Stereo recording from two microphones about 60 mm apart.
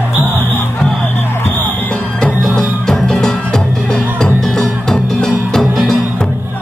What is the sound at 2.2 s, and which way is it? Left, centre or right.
Music, centre.